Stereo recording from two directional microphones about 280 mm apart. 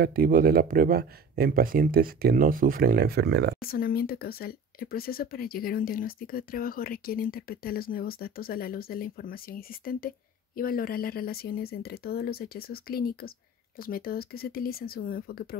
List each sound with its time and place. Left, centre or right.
0.0 s speech: right
3.6 s speech: left